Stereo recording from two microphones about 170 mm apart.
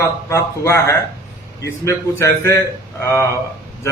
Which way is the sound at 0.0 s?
15° left (ahead or behind).